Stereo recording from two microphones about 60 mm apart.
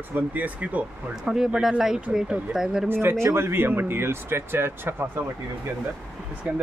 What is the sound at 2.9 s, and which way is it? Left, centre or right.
Speech, right.